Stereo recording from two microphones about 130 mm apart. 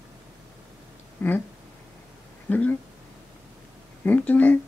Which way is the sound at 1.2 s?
15° left (ahead or behind).